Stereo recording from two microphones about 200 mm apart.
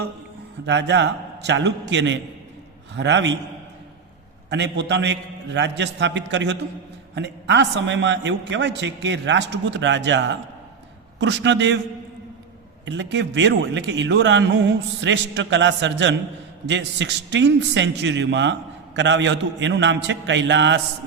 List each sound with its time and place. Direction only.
0.6 s a man's voice: 60° right (ahead or behind)
4.4 s a man's voice: 60° right (ahead or behind)
12.8 s a man's voice: 65° right (ahead or behind)